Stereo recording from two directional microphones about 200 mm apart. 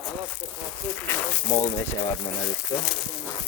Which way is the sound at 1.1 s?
15° left (ahead or behind).